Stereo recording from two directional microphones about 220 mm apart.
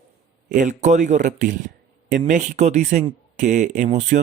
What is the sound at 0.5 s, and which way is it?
Speech, 35° right (ahead or behind).